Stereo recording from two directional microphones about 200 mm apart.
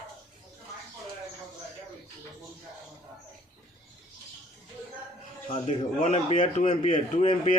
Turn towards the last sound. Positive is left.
turn(degrees=35)  # may be behind; listen again after turning